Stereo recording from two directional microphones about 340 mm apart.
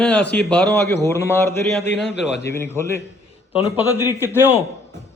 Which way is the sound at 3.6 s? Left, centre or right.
Centre.